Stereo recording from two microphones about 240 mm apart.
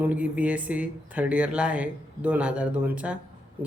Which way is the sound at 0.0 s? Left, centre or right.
Centre.